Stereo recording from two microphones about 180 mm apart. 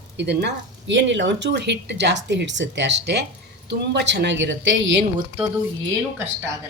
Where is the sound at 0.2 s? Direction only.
70° right (ahead or behind).